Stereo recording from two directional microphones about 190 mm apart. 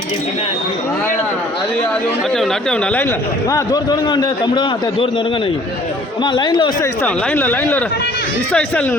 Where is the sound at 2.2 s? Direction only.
Centre (ahead or behind).